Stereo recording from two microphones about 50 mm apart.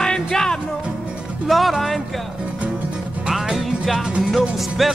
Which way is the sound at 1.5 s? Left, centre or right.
Centre.